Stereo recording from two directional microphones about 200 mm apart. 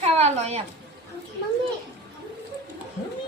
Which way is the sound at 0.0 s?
35° right (ahead or behind).